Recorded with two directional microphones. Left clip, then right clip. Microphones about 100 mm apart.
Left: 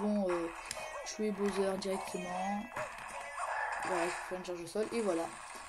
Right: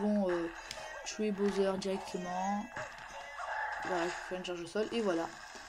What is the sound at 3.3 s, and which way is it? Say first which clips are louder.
Chicken: left 1 dB; 35° left (ahead or behind).